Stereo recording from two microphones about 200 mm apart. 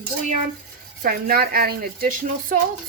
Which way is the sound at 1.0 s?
45° right (ahead or behind).